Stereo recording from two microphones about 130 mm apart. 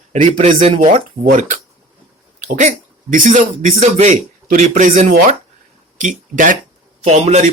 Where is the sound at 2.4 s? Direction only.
75° right (ahead or behind).